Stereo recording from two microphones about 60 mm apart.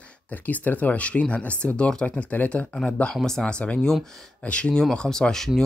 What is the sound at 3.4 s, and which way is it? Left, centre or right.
Speech, centre.